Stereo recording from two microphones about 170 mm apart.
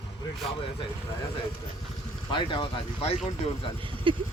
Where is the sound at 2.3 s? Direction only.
30° left (ahead or behind).